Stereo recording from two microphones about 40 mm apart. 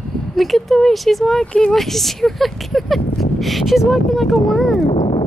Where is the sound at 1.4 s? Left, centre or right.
Left.